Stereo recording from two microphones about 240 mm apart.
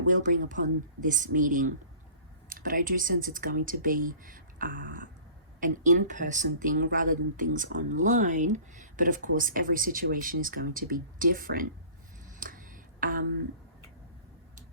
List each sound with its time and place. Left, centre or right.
0.1 s speech: right
6.1 s speech: right
12.2 s a sound: right